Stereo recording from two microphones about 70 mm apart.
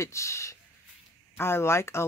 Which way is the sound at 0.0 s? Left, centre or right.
Left.